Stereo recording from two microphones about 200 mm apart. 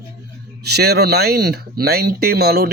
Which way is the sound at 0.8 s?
55° right (ahead or behind).